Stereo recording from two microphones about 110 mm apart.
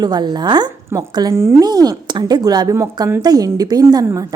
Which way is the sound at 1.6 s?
35° right (ahead or behind).